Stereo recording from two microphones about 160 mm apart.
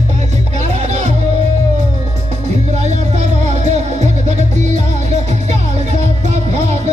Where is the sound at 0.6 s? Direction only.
45° right (ahead or behind).